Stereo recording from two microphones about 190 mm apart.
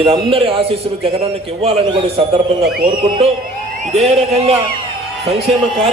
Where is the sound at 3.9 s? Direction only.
35° right (ahead or behind).